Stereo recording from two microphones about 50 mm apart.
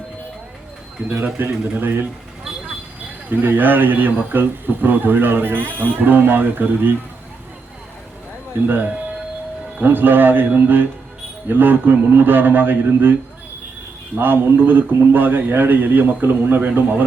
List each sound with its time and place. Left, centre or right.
1.1 s speech: right
3.2 s speech: right
8.6 s speech: right
14.2 s speech: right